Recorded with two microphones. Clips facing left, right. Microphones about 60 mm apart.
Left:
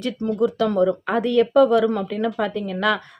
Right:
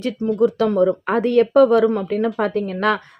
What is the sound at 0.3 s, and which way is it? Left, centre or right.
Speech, right.